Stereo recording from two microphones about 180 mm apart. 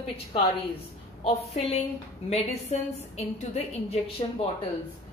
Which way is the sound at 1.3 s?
35° left (ahead or behind).